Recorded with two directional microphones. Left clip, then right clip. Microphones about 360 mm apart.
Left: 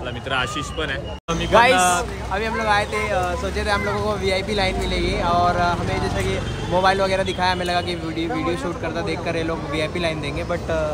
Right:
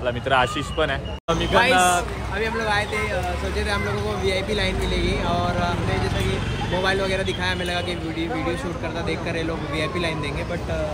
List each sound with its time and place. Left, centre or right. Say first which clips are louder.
0.3 s speech: right 3 dB; centre
1.5 s speech: left 4 dB; centre
1.8 s speech: even; centre
6.8 s speech: left 5 dB; centre